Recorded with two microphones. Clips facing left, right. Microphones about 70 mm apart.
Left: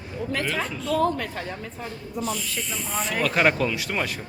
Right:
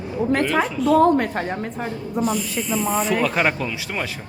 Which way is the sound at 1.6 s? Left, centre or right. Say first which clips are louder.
Right 7 dB; right.